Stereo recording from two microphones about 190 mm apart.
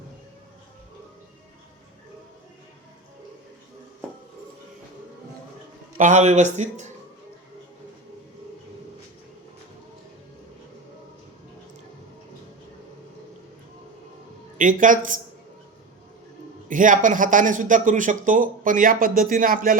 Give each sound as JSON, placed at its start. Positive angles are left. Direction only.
{"t": 6.0, "sound": "a man's voice", "side_deg": -40}
{"t": 14.6, "sound": "a man's voice", "side_deg": -45}
{"t": 16.6, "sound": "a man's voice", "side_deg": -45}